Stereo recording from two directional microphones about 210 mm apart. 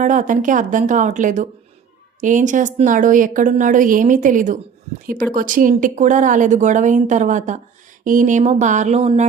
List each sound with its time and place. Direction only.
0.0 s a woman's voice: 35° right (ahead or behind)